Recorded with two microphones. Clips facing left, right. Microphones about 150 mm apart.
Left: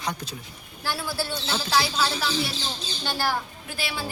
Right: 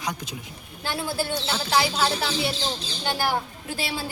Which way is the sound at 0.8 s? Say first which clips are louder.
Right 2 dB; 20° right (ahead or behind).